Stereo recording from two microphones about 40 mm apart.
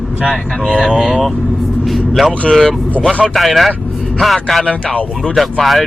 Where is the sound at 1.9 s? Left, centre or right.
Centre.